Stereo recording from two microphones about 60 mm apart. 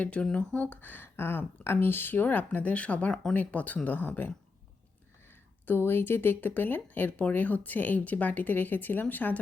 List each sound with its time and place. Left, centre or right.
0.0 s speech: centre
5.6 s speech: left